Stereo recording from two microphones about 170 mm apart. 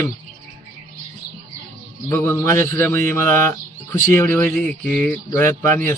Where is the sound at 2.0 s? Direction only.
15° left (ahead or behind).